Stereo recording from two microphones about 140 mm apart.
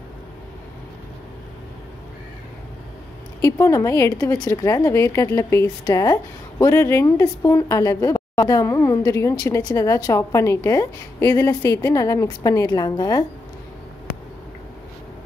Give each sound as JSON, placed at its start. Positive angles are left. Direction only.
{"t": 3.3, "sound": "speech", "side_deg": 25}